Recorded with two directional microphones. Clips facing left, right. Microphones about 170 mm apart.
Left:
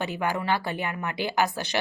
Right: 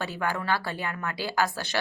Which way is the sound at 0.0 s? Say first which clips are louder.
Left 2 dB; 15° left (ahead or behind).